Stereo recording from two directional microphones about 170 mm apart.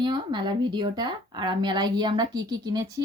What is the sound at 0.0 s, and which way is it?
Speech, 25° right (ahead or behind).